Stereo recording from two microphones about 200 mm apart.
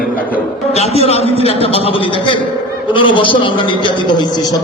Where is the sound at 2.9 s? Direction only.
25° left (ahead or behind).